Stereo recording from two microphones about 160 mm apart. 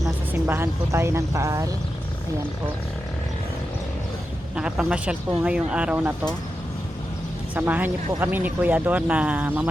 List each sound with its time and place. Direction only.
0.0 s speech: 15° right (ahead or behind)
4.5 s speech: 5° right (ahead or behind)
7.5 s speech: 10° right (ahead or behind)